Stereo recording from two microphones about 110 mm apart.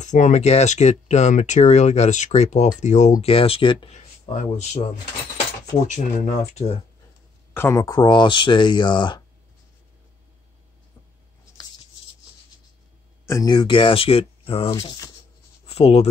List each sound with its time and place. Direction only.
0.0 s speech: 90° left; by 3.9 s 55° left (ahead or behind)
3.9 s speech: 85° left
5.9 s speech: 90° left
7.5 s speech: 25° left (ahead or behind); by 9.2 s 45° left (ahead or behind)
13.2 s a sound: 25° left (ahead or behind)
13.5 s speech: 50° left (ahead or behind)
15.6 s speech: 65° left (ahead or behind)